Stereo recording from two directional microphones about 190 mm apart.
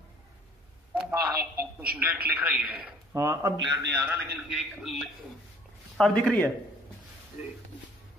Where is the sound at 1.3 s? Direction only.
55° right (ahead or behind).